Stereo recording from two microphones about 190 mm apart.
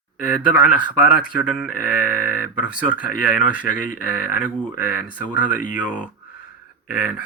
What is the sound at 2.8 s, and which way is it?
Speech, 45° left (ahead or behind).